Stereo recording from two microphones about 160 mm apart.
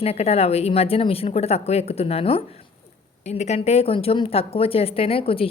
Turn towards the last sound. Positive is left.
turn(degrees=35)  # may be behind; listen again after turning